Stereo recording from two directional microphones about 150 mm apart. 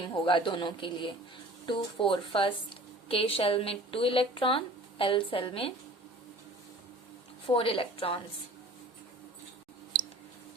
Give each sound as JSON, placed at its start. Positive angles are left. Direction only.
{"t": 0.3, "sound": "a woman's voice", "side_deg": 35}
{"t": 7.4, "sound": "a woman's voice", "side_deg": 35}